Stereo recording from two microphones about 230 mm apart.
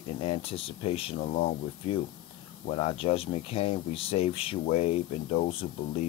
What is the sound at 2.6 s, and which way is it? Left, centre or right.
Speech, left.